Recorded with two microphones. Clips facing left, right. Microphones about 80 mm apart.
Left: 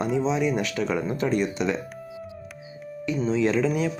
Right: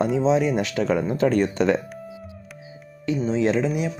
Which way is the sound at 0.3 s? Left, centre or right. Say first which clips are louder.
Right 4 dB; right.